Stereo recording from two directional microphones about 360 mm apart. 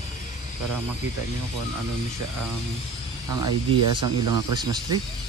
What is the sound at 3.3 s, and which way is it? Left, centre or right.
Speech, right.